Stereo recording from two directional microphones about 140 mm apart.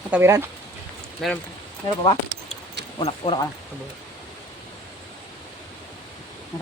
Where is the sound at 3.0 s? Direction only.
40° left (ahead or behind).